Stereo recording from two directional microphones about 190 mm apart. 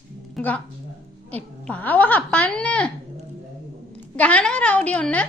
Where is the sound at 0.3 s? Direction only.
5° left (ahead or behind).